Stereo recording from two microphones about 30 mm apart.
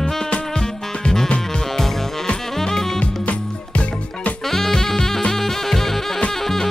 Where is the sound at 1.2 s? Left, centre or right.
Left.